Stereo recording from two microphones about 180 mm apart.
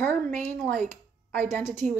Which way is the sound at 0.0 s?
10° left (ahead or behind).